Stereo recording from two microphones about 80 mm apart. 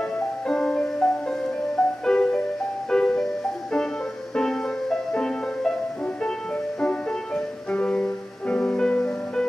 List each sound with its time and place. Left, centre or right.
0.5 s music: centre
4.4 s music: centre
6.8 s music: centre